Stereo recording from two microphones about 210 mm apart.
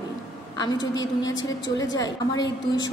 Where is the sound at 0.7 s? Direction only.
60° left (ahead or behind).